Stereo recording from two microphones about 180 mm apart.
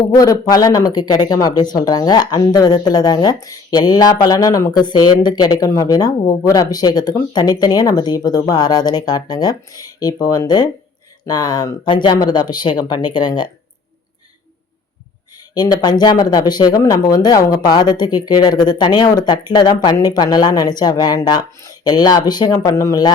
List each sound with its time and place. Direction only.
0.1 s speech: 20° left (ahead or behind)
15.5 s speech: 20° left (ahead or behind)